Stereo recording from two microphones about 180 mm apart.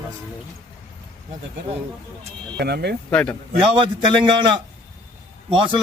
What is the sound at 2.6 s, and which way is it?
Speech, 65° right (ahead or behind).